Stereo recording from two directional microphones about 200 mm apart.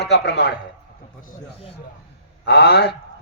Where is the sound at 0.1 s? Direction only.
55° left (ahead or behind).